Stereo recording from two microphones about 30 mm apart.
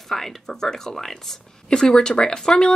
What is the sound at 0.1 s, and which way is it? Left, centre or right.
Speech, centre.